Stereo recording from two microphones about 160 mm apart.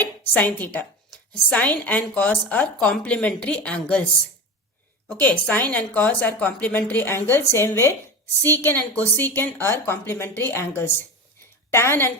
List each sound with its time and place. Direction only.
0.0 s a woman's voice: 10° left (ahead or behind)
5.2 s a woman's voice: 10° left (ahead or behind)